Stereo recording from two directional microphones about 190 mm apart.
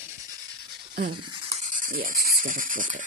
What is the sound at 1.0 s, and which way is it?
Speech, 55° right (ahead or behind).